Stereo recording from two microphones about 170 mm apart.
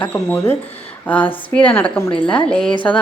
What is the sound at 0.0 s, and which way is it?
A woman's voice, 10° left (ahead or behind).